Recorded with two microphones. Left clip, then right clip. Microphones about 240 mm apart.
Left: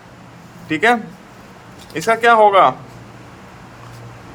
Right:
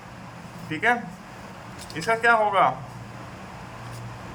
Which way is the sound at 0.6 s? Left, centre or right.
Left.